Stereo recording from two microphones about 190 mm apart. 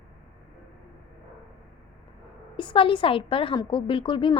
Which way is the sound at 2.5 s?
25° left (ahead or behind).